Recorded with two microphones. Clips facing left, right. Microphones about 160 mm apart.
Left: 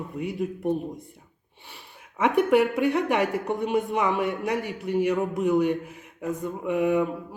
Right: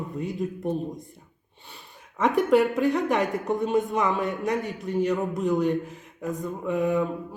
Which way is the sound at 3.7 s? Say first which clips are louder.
Even; 10° left (ahead or behind).